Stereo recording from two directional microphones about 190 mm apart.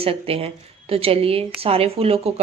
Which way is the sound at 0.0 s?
30° right (ahead or behind).